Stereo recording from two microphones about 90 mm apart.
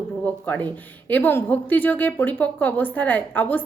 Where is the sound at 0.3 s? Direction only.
15° left (ahead or behind).